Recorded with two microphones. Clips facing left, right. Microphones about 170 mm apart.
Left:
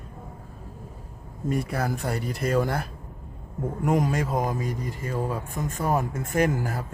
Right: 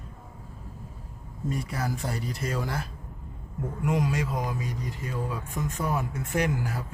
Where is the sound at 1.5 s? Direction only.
55° left (ahead or behind).